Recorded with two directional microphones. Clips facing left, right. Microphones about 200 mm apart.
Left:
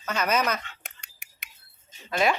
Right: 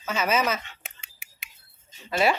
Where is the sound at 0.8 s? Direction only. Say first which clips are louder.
Right 1 dB; 5° right (ahead or behind).